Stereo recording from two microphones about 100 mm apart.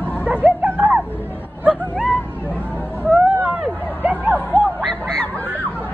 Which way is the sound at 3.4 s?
15° right (ahead or behind).